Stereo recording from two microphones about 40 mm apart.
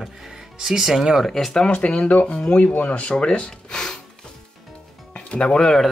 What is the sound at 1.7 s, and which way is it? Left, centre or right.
Speech, left.